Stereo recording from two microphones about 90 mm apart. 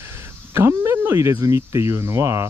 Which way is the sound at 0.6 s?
30° right (ahead or behind).